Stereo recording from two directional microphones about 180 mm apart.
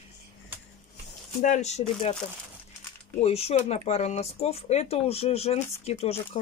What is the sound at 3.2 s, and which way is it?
Speech, 35° left (ahead or behind).